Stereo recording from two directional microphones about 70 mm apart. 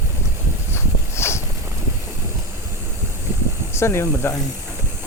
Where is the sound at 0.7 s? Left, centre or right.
Left.